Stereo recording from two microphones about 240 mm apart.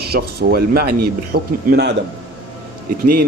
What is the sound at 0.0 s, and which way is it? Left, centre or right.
Speech, right.